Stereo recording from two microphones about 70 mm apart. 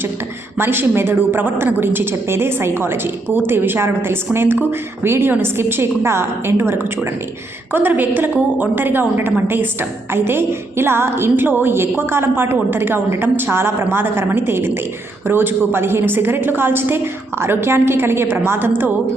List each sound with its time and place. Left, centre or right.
0.6 s a woman's voice: right
7.7 s a woman's voice: right